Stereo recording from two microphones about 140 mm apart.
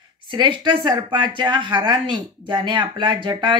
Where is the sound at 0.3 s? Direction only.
35° right (ahead or behind).